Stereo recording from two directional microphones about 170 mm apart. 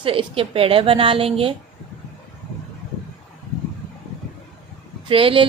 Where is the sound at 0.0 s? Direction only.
30° right (ahead or behind).